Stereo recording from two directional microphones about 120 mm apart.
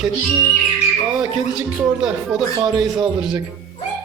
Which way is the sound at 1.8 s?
5° right (ahead or behind).